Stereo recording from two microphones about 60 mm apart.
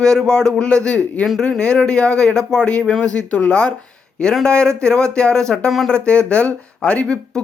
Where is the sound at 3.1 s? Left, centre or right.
Left.